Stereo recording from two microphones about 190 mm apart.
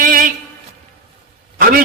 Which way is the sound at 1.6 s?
50° right (ahead or behind).